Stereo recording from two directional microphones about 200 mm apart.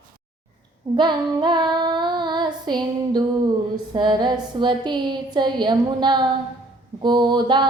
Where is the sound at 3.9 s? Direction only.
20° right (ahead or behind).